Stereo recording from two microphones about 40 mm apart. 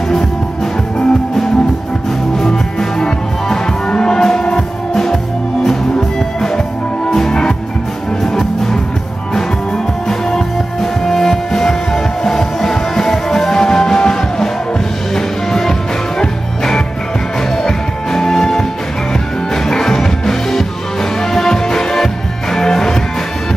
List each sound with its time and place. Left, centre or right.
0.9 s music: centre
10.0 s music: centre